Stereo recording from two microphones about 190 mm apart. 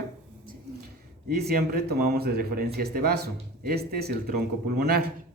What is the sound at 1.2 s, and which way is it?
Speech, 55° right (ahead or behind).